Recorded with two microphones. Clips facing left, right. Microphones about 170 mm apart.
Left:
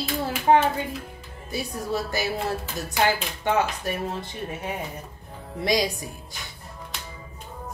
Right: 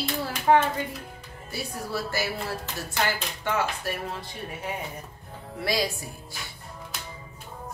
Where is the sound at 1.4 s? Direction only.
20° left (ahead or behind).